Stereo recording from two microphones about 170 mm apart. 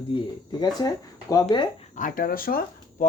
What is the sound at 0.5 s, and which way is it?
Speech, 25° left (ahead or behind).